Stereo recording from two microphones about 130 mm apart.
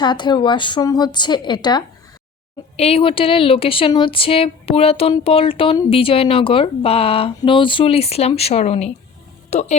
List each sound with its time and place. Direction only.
0.0 s a woman's voice: 35° left (ahead or behind)
2.7 s speech: 50° left (ahead or behind)